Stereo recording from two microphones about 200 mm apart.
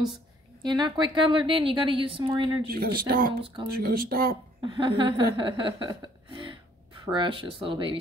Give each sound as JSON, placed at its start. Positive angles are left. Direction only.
{"t": 0.6, "sound": "a woman's voice", "side_deg": -20}
{"t": 2.7, "sound": "speech", "side_deg": -50}
{"t": 4.6, "sound": "a sound", "side_deg": -25}
{"t": 7.1, "sound": "a woman's voice", "side_deg": -25}